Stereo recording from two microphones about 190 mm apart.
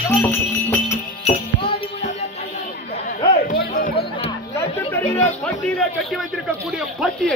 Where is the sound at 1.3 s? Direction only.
35° left (ahead or behind).